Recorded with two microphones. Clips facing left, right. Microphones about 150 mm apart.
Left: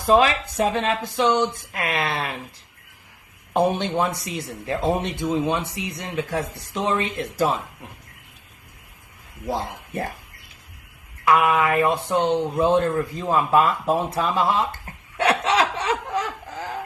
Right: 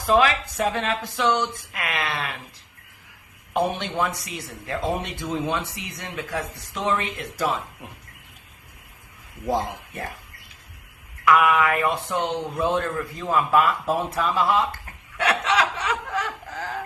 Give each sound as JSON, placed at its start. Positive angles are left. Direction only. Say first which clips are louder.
{"t": 0.1, "sound": "speech", "louder": "left 2 dB", "side_deg": 25}
{"t": 3.5, "sound": "speech", "louder": "left 4 dB", "side_deg": 30}
{"t": 11.3, "sound": "speech", "louder": "even", "side_deg": 30}